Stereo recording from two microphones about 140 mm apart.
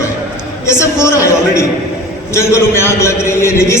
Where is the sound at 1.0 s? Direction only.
20° left (ahead or behind).